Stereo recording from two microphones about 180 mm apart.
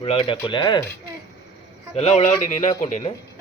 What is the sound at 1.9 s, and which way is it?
Speech, 35° left (ahead or behind).